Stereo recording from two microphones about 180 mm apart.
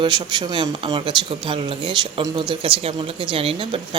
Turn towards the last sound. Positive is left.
turn(degrees=-30)  # may be behind; listen again after turning